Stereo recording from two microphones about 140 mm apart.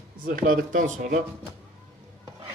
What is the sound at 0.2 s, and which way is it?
Speech, 90° right.